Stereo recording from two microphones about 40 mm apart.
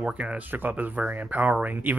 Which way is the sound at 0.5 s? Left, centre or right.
Right.